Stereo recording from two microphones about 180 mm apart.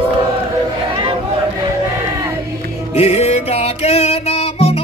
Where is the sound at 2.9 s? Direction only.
35° left (ahead or behind).